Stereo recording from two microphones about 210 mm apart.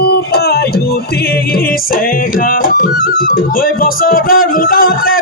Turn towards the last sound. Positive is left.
turn(degrees=45)  # may be behind; listen again after turning